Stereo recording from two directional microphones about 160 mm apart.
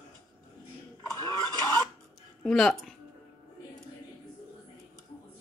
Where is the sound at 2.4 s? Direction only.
Centre (ahead or behind).